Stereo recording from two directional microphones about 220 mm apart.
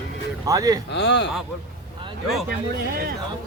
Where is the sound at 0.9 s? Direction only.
50° left (ahead or behind).